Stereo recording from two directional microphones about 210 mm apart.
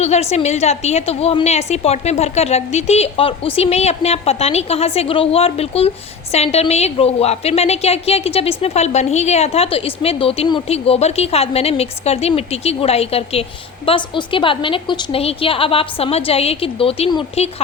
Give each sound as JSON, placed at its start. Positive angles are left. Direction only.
{"t": 0.0, "sound": "a woman's voice", "side_deg": 30}